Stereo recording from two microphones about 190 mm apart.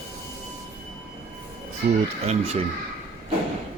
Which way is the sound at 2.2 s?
35° right (ahead or behind).